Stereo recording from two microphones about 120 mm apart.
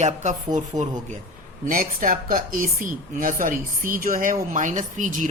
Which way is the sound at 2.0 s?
90° right.